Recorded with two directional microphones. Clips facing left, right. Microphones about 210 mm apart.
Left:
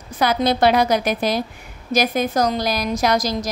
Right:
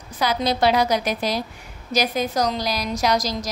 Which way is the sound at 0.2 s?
55° left (ahead or behind).